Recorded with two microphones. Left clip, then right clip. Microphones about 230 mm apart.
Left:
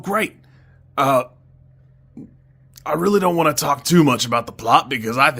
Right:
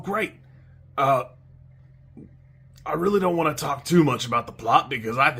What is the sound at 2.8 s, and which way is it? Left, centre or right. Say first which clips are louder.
Speech: left 5 dB; left.